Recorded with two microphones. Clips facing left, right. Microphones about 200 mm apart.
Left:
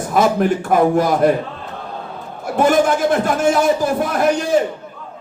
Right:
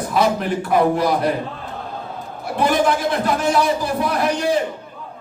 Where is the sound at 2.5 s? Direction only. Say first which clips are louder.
Left 3 dB; 45° left (ahead or behind).